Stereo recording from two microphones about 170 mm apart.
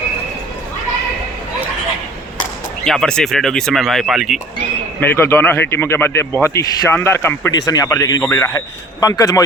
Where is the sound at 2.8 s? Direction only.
5° left (ahead or behind).